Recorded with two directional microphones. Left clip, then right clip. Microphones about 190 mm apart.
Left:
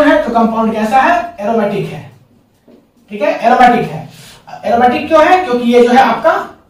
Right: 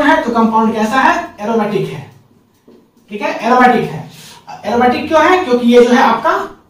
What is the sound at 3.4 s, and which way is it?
Speech, 15° left (ahead or behind).